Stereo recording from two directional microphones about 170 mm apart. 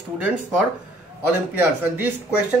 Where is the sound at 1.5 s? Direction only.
10° right (ahead or behind).